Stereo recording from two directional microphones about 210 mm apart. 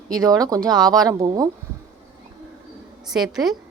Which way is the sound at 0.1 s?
15° right (ahead or behind).